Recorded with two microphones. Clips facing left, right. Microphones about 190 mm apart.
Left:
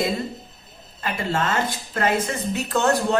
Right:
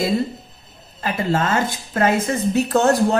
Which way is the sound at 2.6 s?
40° right (ahead or behind).